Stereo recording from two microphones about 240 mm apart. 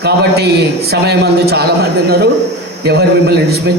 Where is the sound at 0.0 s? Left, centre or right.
Right.